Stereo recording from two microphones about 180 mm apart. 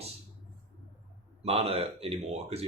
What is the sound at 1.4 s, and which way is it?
Speech, 35° right (ahead or behind).